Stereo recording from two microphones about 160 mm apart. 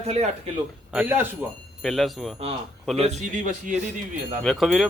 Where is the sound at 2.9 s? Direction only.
45° right (ahead or behind).